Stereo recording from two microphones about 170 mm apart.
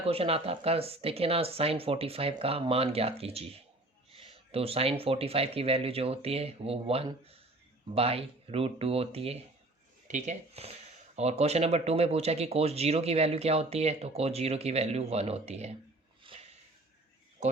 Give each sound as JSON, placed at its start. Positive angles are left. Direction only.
{"t": 0.0, "sound": "speech", "side_deg": -35}
{"t": 16.2, "sound": "snort", "side_deg": -35}